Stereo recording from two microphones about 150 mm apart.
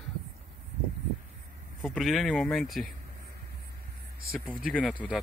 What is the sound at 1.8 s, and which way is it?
Speech, centre (ahead or behind).